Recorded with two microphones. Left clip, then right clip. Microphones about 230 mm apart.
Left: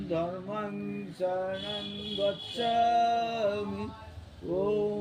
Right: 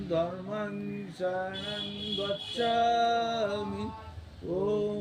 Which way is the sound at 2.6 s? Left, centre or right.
Centre.